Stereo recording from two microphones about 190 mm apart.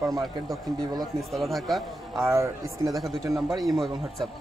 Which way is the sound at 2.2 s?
15° right (ahead or behind).